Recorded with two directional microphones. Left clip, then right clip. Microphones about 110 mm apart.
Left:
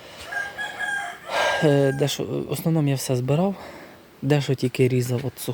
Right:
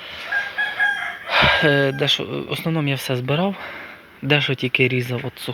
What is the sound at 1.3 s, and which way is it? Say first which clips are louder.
Speech: right 5 dB; 35° left (ahead or behind).